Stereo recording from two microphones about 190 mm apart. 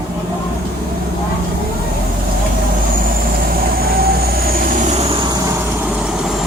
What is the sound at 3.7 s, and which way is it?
Vehicle, 50° right (ahead or behind).